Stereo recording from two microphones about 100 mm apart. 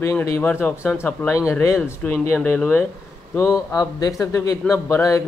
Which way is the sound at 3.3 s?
30° left (ahead or behind).